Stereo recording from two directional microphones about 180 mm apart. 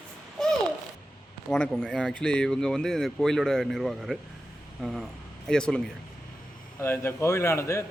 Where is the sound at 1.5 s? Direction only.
5° left (ahead or behind).